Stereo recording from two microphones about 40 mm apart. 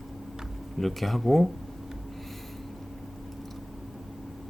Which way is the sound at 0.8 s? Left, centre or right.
Centre.